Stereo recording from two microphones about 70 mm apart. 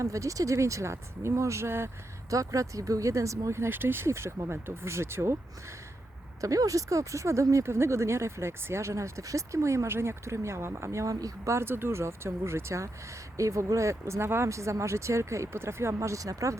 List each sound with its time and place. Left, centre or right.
0.0 s speech: right
2.3 s speech: right
6.4 s speech: right